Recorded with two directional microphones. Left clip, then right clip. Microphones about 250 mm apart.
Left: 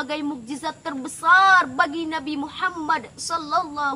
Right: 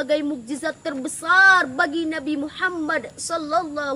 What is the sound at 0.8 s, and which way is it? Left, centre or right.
Speech, left.